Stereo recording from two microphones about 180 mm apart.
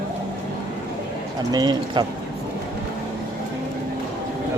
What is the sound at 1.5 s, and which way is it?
Speech, 25° right (ahead or behind).